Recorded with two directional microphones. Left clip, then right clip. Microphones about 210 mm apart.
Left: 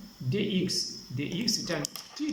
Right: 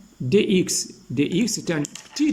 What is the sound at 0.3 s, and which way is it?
Speech, 50° right (ahead or behind).